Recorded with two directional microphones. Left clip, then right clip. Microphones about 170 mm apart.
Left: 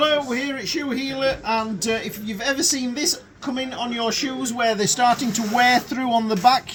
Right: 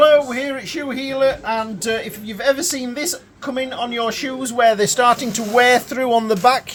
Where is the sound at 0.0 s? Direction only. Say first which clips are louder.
Right 7 dB; 20° right (ahead or behind).